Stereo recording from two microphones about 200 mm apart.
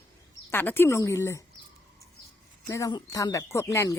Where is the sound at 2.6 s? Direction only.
15° left (ahead or behind).